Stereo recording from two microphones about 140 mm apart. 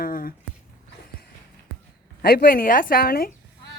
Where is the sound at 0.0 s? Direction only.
90° left.